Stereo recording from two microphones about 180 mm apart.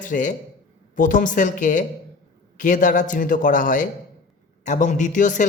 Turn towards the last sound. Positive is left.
turn(degrees=45)  # may be behind; listen again after turning